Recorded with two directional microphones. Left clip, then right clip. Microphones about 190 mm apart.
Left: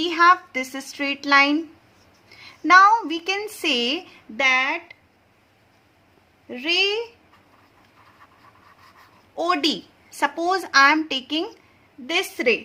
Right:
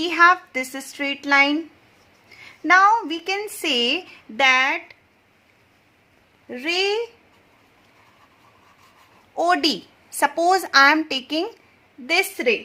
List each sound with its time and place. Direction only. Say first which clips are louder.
0.0 s a woman's voice: right 1 dB; 20° right (ahead or behind)
4.4 s speech: right 2 dB; 35° right (ahead or behind)
6.5 s speech: left 1 dB; 35° right (ahead or behind)
9.3 s a woman's voice: right 2 dB; 30° right (ahead or behind)